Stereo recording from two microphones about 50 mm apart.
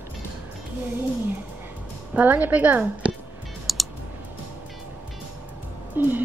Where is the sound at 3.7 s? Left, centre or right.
Centre.